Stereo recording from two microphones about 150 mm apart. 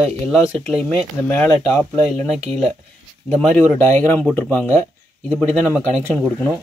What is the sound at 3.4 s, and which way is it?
Speech, 10° left (ahead or behind).